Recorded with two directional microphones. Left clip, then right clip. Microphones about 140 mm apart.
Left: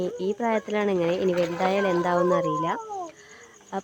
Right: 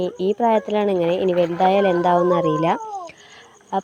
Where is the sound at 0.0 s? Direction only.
20° right (ahead or behind); by 2.8 s 35° right (ahead or behind).